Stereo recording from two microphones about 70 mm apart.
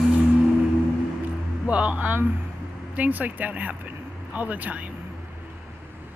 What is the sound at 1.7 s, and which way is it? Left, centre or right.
Speech, centre.